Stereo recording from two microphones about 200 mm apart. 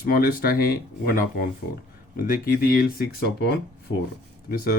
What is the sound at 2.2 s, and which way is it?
Speech, 45° left (ahead or behind).